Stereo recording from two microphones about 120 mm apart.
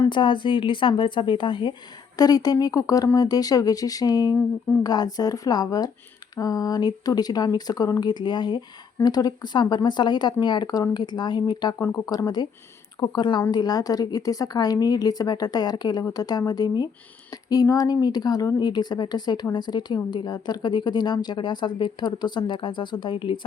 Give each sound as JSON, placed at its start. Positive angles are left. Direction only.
{"t": 0.1, "sound": "speech", "side_deg": 40}
{"t": 2.1, "sound": "a woman's voice", "side_deg": 30}